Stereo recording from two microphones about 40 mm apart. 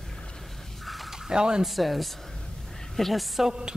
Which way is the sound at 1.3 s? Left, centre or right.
Centre.